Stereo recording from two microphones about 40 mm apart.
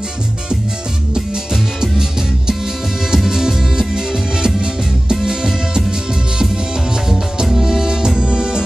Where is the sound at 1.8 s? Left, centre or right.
Centre.